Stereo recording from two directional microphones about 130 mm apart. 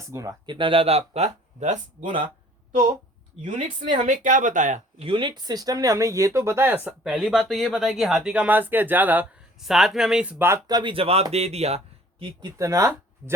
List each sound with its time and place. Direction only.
0.0 s speech: 25° right (ahead or behind)
0.4 s speech: 40° right (ahead or behind); by 2.1 s 75° right (ahead or behind)
3.9 s speech: 75° right (ahead or behind)
4.9 s speech: 40° right (ahead or behind)
5.4 s speech: 30° right (ahead or behind); by 9.2 s 15° right (ahead or behind)
9.6 s speech: 5° right (ahead or behind)
10.3 s speech: 20° right (ahead or behind)
10.7 s speech: 35° right (ahead or behind); by 11.8 s 55° right (ahead or behind)
12.2 s speech: 30° right (ahead or behind)